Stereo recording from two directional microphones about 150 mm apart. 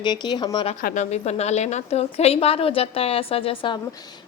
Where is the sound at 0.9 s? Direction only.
45° left (ahead or behind).